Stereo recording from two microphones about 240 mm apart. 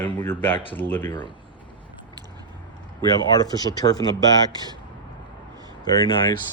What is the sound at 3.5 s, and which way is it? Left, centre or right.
Speech, centre.